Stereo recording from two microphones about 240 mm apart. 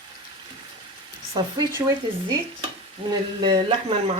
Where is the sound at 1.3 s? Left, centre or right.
Centre.